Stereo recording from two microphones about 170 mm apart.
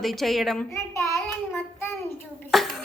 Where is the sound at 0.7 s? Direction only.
15° left (ahead or behind).